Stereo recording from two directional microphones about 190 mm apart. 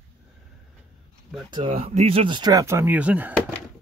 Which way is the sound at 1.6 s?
35° right (ahead or behind).